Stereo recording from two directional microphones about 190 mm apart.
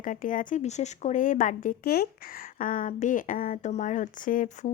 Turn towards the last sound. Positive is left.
turn(degrees=40)  # may be behind; listen again after turning